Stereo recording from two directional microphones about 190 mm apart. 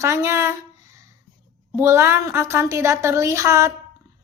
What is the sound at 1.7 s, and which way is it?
A woman's voice, 15° right (ahead or behind).